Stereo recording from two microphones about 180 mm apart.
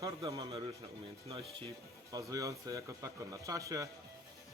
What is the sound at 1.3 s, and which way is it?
Speech, 35° right (ahead or behind).